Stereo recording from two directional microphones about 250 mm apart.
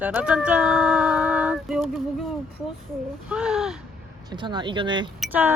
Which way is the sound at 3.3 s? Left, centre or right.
Centre.